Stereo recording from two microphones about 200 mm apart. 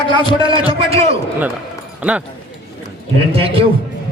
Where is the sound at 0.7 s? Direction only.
30° right (ahead or behind).